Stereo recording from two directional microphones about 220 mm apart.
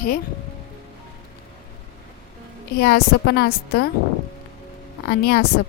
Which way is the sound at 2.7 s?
45° left (ahead or behind).